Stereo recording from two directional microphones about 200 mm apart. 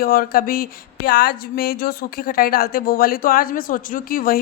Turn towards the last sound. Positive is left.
turn(degrees=45)  # may be behind; listen again after turning